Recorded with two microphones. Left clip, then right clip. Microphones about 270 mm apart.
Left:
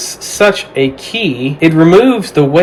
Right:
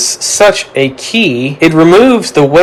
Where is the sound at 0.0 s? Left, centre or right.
Centre.